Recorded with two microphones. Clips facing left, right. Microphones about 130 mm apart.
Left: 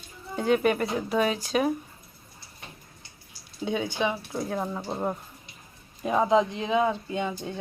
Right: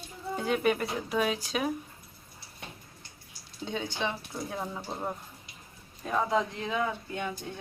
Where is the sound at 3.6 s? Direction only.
10° left (ahead or behind).